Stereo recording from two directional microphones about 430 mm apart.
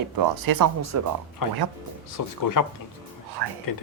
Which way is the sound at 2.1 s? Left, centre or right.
Left.